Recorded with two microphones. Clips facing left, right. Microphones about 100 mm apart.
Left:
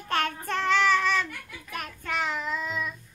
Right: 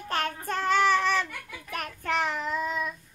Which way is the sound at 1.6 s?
50° right (ahead or behind).